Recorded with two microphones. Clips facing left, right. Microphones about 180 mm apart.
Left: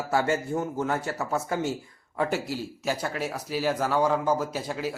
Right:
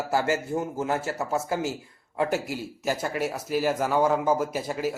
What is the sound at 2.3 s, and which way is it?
Speech, 45° right (ahead or behind).